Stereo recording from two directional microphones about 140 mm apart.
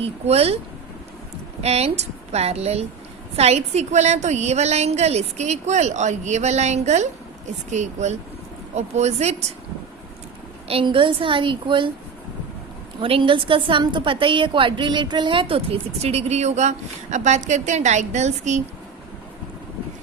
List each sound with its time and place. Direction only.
0.0 s a woman's voice: 45° right (ahead or behind)
1.6 s a woman's voice: 50° right (ahead or behind)
10.7 s a woman's voice: 40° right (ahead or behind)
13.0 s a woman's voice: 40° right (ahead or behind); by 18.6 s 55° right (ahead or behind)